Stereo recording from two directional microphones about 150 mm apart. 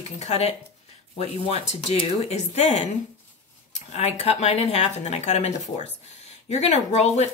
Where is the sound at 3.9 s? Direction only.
45° left (ahead or behind).